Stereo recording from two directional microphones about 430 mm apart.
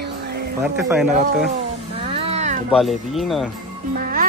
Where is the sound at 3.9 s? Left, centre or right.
Centre.